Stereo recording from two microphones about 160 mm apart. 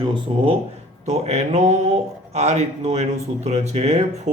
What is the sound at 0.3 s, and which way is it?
Speech, 35° right (ahead or behind).